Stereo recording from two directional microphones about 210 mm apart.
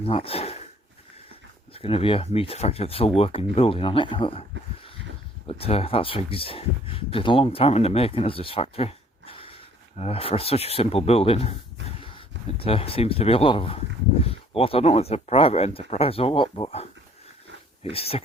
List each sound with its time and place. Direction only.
0.0 s speech: 25° left (ahead or behind)
1.7 s speech: 25° left (ahead or behind)
5.5 s speech: 25° left (ahead or behind)
11.9 s a sound: 25° left (ahead or behind)
12.5 s speech: 25° left (ahead or behind)
17.9 s speech: 25° left (ahead or behind)